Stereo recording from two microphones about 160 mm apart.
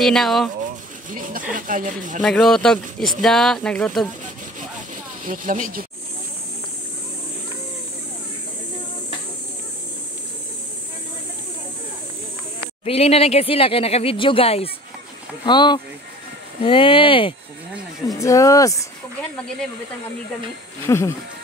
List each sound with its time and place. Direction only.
0.0 s speech: centre (ahead or behind)
1.1 s speech: 60° right (ahead or behind)
2.2 s speech: 5° left (ahead or behind)
5.2 s speech: 55° right (ahead or behind)
12.8 s speech: 40° left (ahead or behind)
18.0 s speech: 20° left (ahead or behind)
20.8 s speech: 15° left (ahead or behind)